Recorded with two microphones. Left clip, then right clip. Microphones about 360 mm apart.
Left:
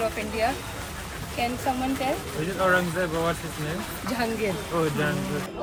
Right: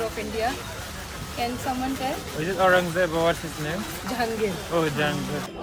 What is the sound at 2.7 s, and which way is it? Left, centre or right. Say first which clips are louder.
Speech: right 3 dB; right.